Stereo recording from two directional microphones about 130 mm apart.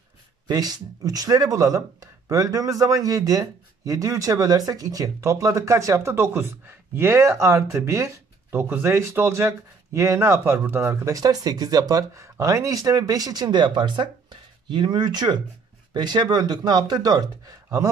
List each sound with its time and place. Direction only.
0.5 s speech: 30° right (ahead or behind)